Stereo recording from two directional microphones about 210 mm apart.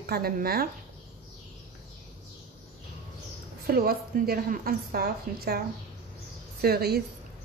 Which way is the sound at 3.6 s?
45° right (ahead or behind).